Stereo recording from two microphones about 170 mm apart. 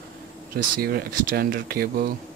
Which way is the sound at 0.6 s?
60° right (ahead or behind).